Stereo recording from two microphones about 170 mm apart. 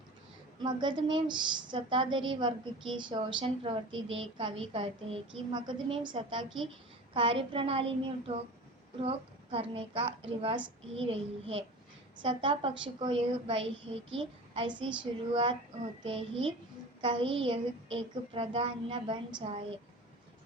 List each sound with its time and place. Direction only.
0.6 s a woman's voice: 25° right (ahead or behind)
16.0 s a child's voice: 35° right (ahead or behind)